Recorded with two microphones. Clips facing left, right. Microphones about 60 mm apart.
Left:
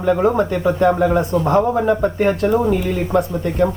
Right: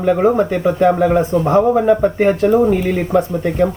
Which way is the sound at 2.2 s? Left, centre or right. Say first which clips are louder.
Right 3 dB; right.